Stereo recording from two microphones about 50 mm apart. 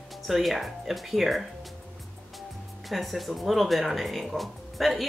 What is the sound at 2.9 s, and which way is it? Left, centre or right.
Speech, centre.